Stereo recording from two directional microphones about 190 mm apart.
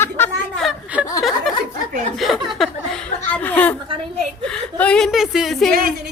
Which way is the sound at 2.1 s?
Centre (ahead or behind).